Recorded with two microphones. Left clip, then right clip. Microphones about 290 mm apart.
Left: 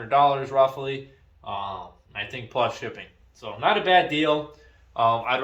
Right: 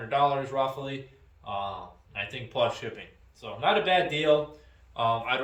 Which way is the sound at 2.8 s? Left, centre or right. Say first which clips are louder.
Left 3 dB; centre.